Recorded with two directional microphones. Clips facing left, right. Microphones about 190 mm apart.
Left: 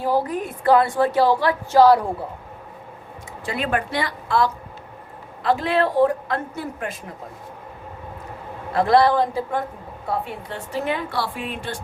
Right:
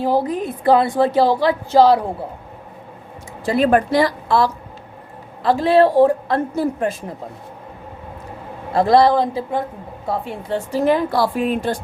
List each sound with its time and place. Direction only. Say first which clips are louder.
0.0 s a woman's voice: right 3 dB; 20° right (ahead or behind)
3.4 s a woman's voice: right 9 dB; 40° right (ahead or behind)
8.7 s a woman's voice: right 3 dB; 30° right (ahead or behind)
10.5 s a woman's voice: right 9 dB; 35° right (ahead or behind)